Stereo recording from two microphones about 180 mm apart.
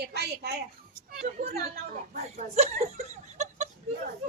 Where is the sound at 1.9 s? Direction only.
45° right (ahead or behind).